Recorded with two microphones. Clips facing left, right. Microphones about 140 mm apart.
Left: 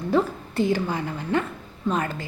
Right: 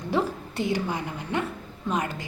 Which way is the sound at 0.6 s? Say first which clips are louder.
Left 4 dB; 15° right (ahead or behind).